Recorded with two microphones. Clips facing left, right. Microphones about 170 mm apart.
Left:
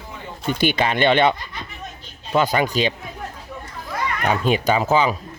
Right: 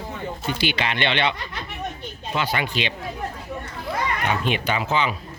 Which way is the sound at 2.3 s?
45° left (ahead or behind).